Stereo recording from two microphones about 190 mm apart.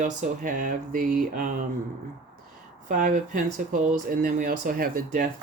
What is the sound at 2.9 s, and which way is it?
Speech, 45° right (ahead or behind).